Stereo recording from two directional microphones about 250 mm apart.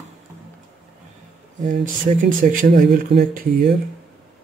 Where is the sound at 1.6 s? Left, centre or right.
Right.